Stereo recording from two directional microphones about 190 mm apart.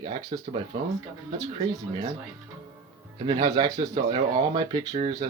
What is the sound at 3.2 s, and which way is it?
Speech, 20° right (ahead or behind).